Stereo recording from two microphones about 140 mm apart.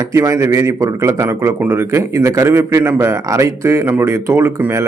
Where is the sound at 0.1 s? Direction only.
20° right (ahead or behind).